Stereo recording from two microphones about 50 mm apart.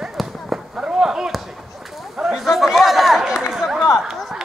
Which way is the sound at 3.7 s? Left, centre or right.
Centre.